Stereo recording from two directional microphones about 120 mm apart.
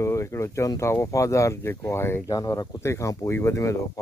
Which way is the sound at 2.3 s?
35° left (ahead or behind).